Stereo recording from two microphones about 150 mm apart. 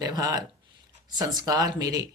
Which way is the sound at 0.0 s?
25° right (ahead or behind).